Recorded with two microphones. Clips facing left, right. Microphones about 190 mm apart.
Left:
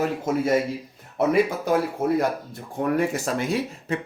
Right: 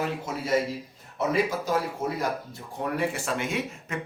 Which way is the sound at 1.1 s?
55° left (ahead or behind).